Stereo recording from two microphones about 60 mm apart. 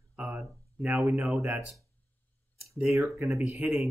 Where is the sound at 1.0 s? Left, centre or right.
Right.